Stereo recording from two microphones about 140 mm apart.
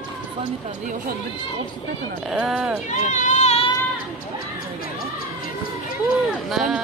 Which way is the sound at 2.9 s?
65° left (ahead or behind).